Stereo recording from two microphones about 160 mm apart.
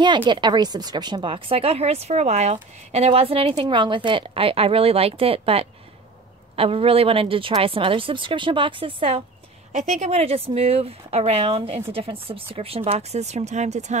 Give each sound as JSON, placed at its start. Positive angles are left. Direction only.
{"t": 0.0, "sound": "speech", "side_deg": -30}
{"t": 9.7, "sound": "speech", "side_deg": -50}